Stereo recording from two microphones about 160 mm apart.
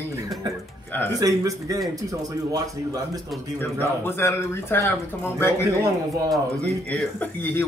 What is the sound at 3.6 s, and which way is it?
Speech, 15° left (ahead or behind).